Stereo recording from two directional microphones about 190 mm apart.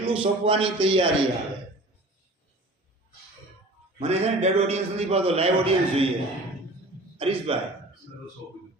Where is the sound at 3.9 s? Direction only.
35° right (ahead or behind).